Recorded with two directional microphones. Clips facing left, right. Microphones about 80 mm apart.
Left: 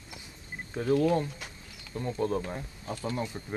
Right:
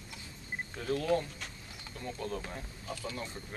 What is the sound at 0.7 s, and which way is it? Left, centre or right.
Speech, left.